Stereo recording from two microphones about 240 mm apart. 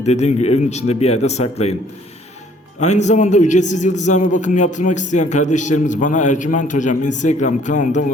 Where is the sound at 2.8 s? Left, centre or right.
Left.